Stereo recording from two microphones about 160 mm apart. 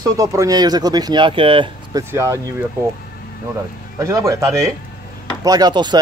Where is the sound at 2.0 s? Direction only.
15° right (ahead or behind).